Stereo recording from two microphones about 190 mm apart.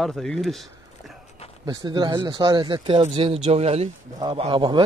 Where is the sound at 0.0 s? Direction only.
Centre (ahead or behind).